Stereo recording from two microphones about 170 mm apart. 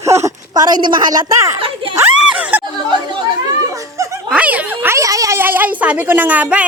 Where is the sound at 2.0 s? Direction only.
5° right (ahead or behind).